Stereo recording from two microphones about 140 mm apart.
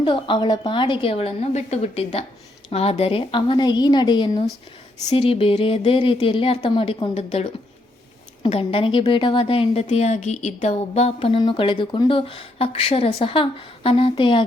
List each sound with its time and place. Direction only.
0.0 s a woman's voice: 35° left (ahead or behind)
8.4 s a woman's voice: 40° left (ahead or behind)
9.8 s a woman's voice: 50° left (ahead or behind); by 14.4 s 35° left (ahead or behind)